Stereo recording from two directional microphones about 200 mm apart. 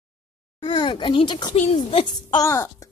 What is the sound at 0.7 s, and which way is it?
A child's voice, 25° left (ahead or behind).